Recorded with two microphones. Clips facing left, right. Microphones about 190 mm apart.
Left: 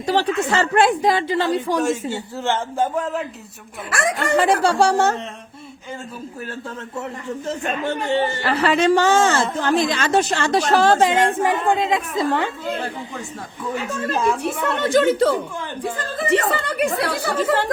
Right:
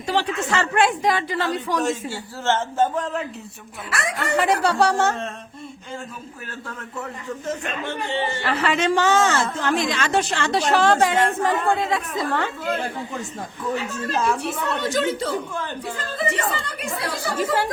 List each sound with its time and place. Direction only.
0.0 s speech: 40° left (ahead or behind)
1.8 s a man's voice: 15° left (ahead or behind)
3.8 s speech: 50° left (ahead or behind)
4.4 s speech: 30° left (ahead or behind)
7.4 s speech: 40° left (ahead or behind)
11.3 s a man's voice: 15° left (ahead or behind)
14.8 s speech: 55° left (ahead or behind)
15.8 s speech: 50° left (ahead or behind)
16.6 s speech: 65° left (ahead or behind)
17.3 s speech: 10° right (ahead or behind)